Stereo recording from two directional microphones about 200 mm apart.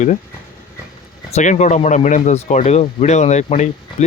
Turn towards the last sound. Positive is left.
turn(degrees=35)  # may be behind; listen again after turning